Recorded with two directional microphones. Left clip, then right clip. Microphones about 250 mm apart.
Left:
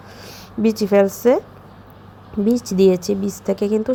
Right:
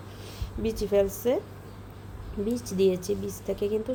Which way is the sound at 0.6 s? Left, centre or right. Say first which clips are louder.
Left 9 dB; left.